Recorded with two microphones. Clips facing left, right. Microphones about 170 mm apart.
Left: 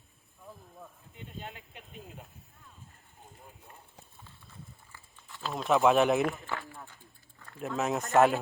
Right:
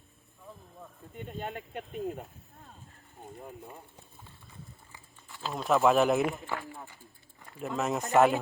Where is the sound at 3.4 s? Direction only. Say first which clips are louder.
Right 10 dB; 65° right (ahead or behind).